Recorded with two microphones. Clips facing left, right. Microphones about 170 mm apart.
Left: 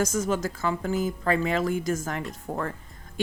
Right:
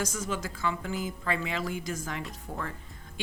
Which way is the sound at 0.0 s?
45° left (ahead or behind).